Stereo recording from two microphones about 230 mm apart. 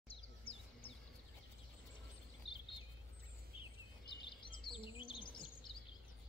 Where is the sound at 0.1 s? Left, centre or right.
Left.